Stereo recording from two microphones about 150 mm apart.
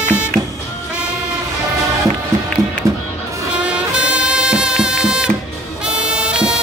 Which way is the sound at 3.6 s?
5° right (ahead or behind).